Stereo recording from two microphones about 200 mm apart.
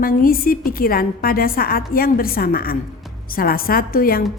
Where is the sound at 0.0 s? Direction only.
45° left (ahead or behind).